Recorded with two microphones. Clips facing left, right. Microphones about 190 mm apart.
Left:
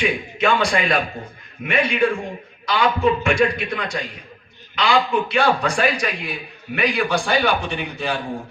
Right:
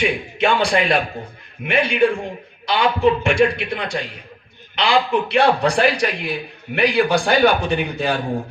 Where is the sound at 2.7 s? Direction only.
30° right (ahead or behind).